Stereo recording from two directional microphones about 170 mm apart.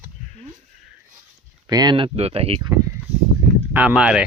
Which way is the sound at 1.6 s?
25° right (ahead or behind).